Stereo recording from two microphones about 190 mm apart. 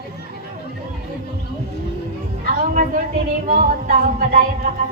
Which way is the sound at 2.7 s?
40° right (ahead or behind).